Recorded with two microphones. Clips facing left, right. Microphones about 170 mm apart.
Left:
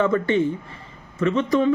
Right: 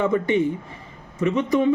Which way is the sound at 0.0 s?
15° right (ahead or behind).